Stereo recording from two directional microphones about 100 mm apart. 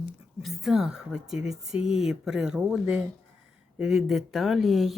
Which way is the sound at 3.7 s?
5° right (ahead or behind).